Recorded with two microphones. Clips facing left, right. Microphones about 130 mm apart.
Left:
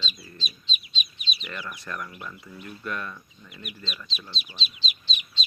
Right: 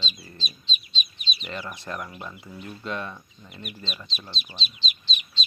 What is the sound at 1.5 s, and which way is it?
Speech, 25° right (ahead or behind).